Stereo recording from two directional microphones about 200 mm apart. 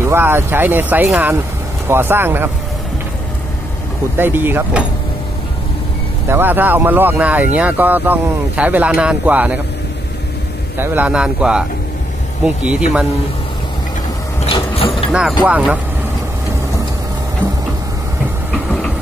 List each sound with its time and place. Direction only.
0.0 s speech: 10° right (ahead or behind)
4.2 s speech: 10° right (ahead or behind)
6.2 s speech: 10° right (ahead or behind)
10.8 s a man's voice: 10° right (ahead or behind)
14.4 s ratchet: 25° left (ahead or behind)
15.4 s speech: 5° right (ahead or behind)